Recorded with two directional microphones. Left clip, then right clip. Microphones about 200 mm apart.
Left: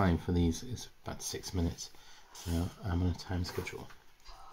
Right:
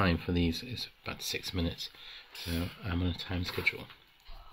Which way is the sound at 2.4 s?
5° right (ahead or behind).